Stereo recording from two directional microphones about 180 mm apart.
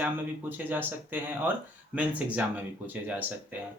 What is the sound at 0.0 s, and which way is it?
Speech, 10° right (ahead or behind).